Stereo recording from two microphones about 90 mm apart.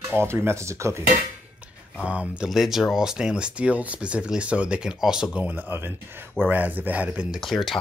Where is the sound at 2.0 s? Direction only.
10° right (ahead or behind).